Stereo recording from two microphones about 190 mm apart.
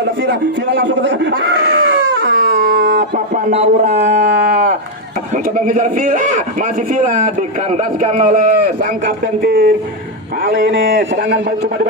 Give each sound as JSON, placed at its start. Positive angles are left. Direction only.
{"t": 0.8, "sound": "a sound", "side_deg": -70}
{"t": 3.5, "sound": "a man's voice", "side_deg": -35}
{"t": 7.7, "sound": "a man's voice", "side_deg": -35}